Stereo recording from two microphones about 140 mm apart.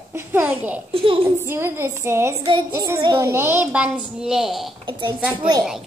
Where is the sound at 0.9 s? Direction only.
40° right (ahead or behind).